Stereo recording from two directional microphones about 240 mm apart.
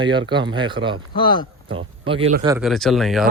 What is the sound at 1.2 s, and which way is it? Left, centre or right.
Speech, centre.